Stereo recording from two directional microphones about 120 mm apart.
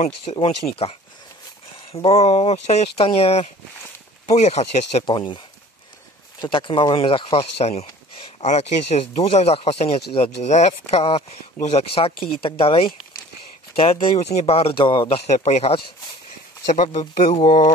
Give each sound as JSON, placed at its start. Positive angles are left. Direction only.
{"t": 0.0, "sound": "speech", "side_deg": 60}
{"t": 4.3, "sound": "speech", "side_deg": 65}
{"t": 5.0, "sound": "speech", "side_deg": 40}
{"t": 6.4, "sound": "speech", "side_deg": 45}
{"t": 8.4, "sound": "speech", "side_deg": 70}
{"t": 14.1, "sound": "speech", "side_deg": 65}
{"t": 15.3, "sound": "speech", "side_deg": 70}